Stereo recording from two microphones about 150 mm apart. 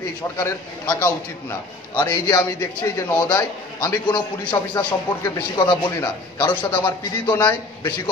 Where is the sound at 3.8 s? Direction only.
25° left (ahead or behind).